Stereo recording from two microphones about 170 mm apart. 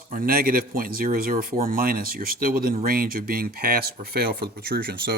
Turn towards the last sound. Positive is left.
turn(degrees=-65)  # may be behind; listen again after turning